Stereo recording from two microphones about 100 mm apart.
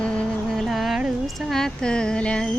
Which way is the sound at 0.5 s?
Centre (ahead or behind).